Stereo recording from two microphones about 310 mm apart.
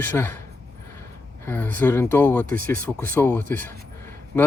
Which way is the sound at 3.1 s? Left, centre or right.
Centre.